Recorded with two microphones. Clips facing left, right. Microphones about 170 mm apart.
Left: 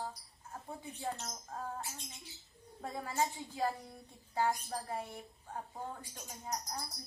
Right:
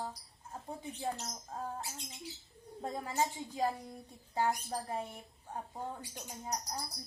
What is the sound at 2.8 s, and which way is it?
A woman's voice, 20° right (ahead or behind).